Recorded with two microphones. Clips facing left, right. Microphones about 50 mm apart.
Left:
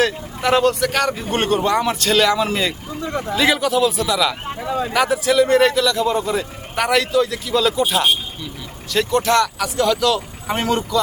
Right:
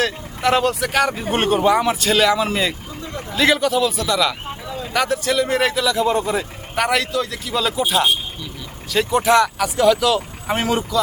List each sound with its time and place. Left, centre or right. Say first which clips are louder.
0.0 s a man's voice: left 1 dB; centre
9.0 s a man's voice: right 2 dB; centre